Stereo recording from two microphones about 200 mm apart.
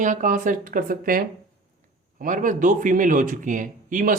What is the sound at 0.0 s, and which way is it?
A man's voice, 40° right (ahead or behind).